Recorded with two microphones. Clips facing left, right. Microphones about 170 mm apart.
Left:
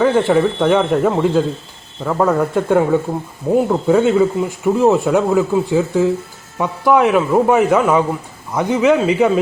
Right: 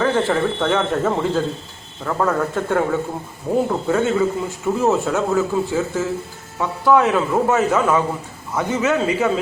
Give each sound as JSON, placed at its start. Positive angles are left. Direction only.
{"t": 0.0, "sound": "a man's voice", "side_deg": 10}